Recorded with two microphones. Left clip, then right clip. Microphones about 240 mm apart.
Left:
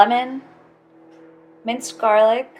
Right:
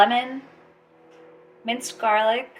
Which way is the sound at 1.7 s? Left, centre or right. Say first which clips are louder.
Left 4 dB; centre.